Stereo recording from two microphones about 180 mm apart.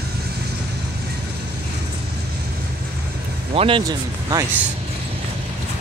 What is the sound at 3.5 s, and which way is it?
Speech, 30° right (ahead or behind).